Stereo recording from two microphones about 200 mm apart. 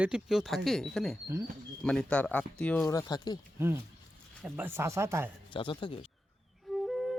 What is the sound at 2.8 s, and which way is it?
Speech, 20° left (ahead or behind).